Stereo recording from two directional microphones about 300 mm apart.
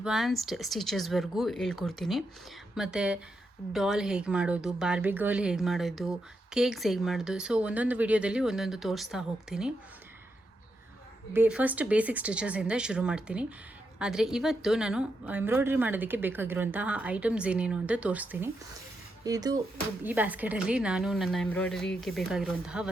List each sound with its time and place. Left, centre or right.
0.0 s speech: centre
11.3 s speech: centre